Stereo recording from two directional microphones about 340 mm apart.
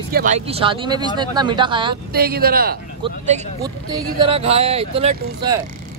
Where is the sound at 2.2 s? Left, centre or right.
Right.